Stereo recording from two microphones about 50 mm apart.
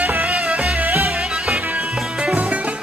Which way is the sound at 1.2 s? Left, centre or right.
Centre.